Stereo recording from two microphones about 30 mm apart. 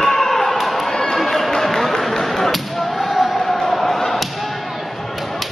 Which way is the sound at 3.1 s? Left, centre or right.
Centre.